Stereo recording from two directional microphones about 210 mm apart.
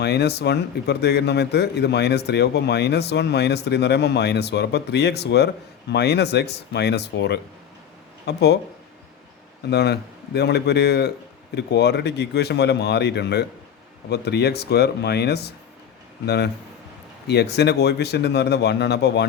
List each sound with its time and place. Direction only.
0.0 s speech: 50° left (ahead or behind)
9.6 s speech: 50° left (ahead or behind)